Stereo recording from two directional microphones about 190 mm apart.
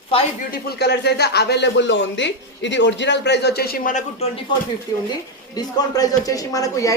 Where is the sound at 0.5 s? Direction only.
60° left (ahead or behind).